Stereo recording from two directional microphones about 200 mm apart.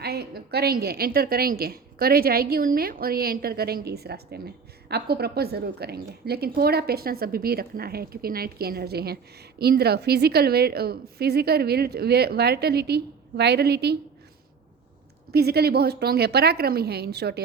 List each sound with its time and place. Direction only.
0.0 s a woman's voice: 55° right (ahead or behind)
15.3 s a woman's voice: 55° right (ahead or behind)